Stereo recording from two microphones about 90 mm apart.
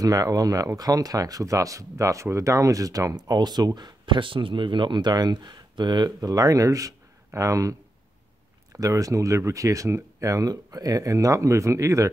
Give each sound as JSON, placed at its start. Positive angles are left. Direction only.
{"t": 0.0, "sound": "speech", "side_deg": -40}
{"t": 8.7, "sound": "speech", "side_deg": -40}